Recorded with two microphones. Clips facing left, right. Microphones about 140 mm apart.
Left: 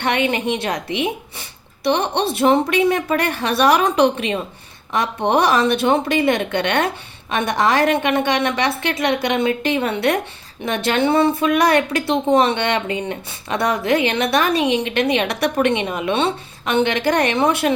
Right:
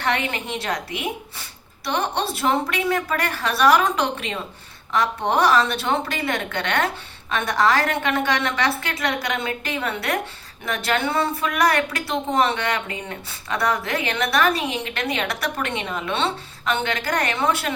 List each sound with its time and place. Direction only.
0.3 s speech: 20° left (ahead or behind)